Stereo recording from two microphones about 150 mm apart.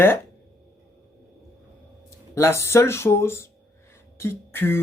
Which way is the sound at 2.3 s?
15° left (ahead or behind).